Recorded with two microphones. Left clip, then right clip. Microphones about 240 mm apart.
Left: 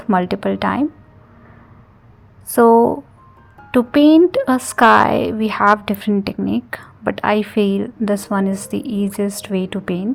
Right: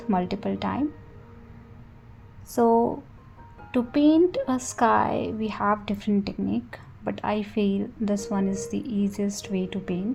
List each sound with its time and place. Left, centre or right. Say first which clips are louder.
0.1 s speech: left 10 dB; left
2.5 s speech: left 10 dB; left